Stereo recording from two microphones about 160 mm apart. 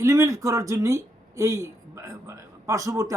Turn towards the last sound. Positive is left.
turn(degrees=-20)  # may be behind; listen again after turning